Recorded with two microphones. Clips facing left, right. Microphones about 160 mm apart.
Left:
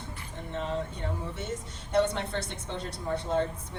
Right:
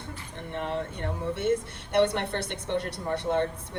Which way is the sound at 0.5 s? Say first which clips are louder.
Right 1 dB; 60° right (ahead or behind).